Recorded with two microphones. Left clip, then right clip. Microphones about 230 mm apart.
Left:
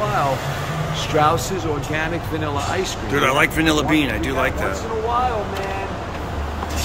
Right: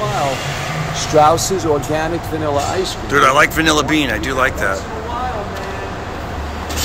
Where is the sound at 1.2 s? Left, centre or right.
Right.